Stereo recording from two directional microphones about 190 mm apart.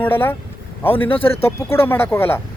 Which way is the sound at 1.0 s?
30° left (ahead or behind).